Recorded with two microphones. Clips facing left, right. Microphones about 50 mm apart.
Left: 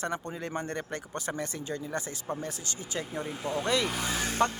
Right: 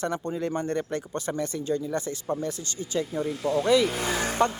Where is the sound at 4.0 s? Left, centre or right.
Right.